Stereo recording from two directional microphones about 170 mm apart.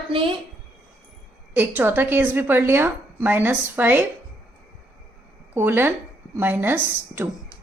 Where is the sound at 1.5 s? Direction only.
10° right (ahead or behind).